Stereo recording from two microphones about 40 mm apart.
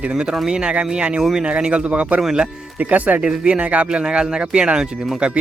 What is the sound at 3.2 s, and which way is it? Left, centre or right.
Speech, right.